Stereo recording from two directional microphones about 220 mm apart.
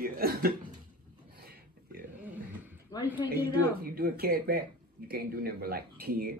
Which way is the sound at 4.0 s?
40° right (ahead or behind).